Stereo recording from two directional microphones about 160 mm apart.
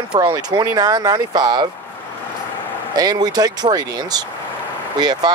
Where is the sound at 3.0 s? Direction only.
25° right (ahead or behind).